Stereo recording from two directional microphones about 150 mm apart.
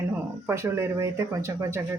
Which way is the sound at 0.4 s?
15° right (ahead or behind).